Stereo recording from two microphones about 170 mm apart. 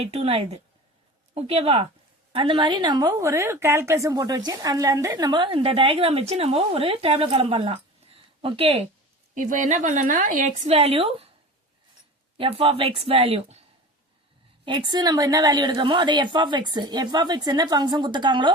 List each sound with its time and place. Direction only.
0.0 s a woman's voice: 35° right (ahead or behind)
9.3 s a woman's voice: 50° right (ahead or behind)
12.4 s a woman's voice: 30° right (ahead or behind)